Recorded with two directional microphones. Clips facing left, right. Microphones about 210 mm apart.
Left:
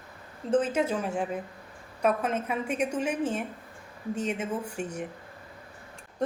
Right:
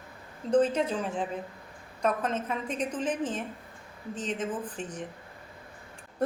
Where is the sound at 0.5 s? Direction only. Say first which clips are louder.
Right 1 dB; 5° left (ahead or behind).